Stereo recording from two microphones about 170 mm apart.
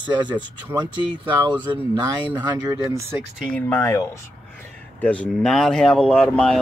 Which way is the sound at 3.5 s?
15° left (ahead or behind).